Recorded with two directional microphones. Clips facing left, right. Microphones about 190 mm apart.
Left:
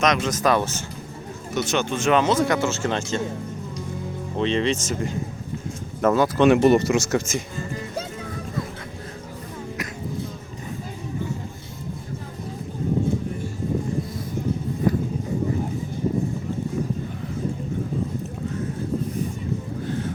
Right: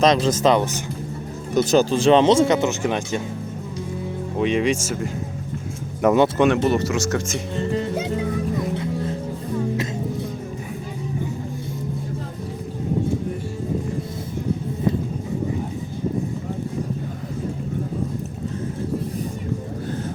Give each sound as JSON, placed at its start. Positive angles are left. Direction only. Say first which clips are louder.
{"t": 0.0, "sound": "speech", "louder": "right 4 dB", "side_deg": -30}
{"t": 1.5, "sound": "speech", "louder": "right 7 dB", "side_deg": -35}
{"t": 4.4, "sound": "speech", "louder": "right 2 dB", "side_deg": -10}
{"t": 6.5, "sound": "speech", "louder": "left 3 dB", "side_deg": 15}
{"t": 7.5, "sound": "music", "louder": "right 7 dB", "side_deg": -70}